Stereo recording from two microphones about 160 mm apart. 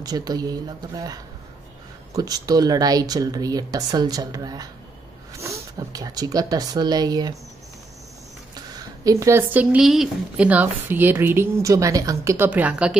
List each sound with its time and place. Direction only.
0.0 s speech: 25° right (ahead or behind)
8.5 s a woman's voice: 20° right (ahead or behind)